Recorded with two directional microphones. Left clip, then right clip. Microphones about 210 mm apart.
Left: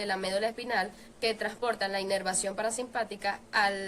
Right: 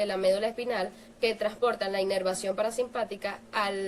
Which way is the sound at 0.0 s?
20° left (ahead or behind).